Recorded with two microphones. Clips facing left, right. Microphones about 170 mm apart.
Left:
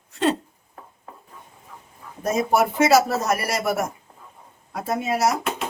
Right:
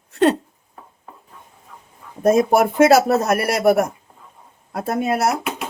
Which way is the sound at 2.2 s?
55° right (ahead or behind).